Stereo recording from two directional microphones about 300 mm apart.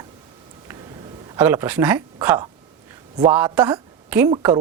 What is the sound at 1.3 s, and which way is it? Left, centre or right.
A woman's voice, centre.